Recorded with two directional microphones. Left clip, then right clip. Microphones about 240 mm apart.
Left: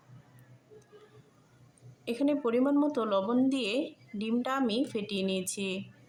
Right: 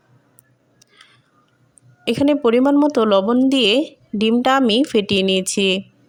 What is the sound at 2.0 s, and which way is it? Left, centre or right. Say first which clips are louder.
A woman's voice: right 14 dB; right.